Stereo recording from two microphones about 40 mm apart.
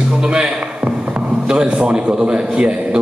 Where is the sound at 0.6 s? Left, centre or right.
Right.